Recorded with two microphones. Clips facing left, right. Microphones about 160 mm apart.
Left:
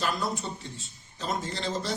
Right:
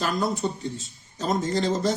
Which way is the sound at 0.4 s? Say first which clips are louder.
Right 9 dB; 40° right (ahead or behind).